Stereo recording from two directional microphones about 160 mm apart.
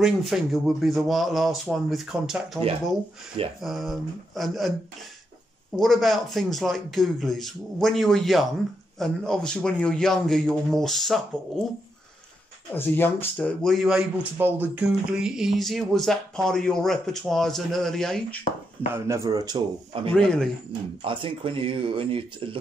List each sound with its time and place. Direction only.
0.0 s speech: centre (ahead or behind)
3.6 s speech: centre (ahead or behind)
5.8 s speech: centre (ahead or behind)
12.7 s speech: 15° left (ahead or behind)
18.9 s speech: 20° right (ahead or behind)
20.1 s speech: 5° left (ahead or behind)
21.0 s speech: 30° right (ahead or behind)